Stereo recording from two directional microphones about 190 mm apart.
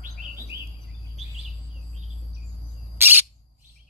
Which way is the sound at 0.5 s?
15° right (ahead or behind).